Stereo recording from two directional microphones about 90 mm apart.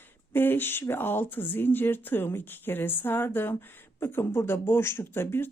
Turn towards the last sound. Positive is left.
turn(degrees=25)  # may be behind; listen again after turning